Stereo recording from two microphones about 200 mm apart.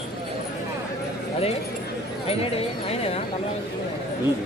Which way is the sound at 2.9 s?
30° left (ahead or behind).